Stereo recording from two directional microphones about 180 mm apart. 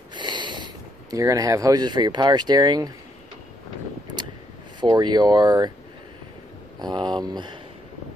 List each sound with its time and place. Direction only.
0.1 s a sound: 25° right (ahead or behind)
1.1 s speech: 20° right (ahead or behind)
4.7 s speech: 25° right (ahead or behind)
6.8 s speech: 25° right (ahead or behind)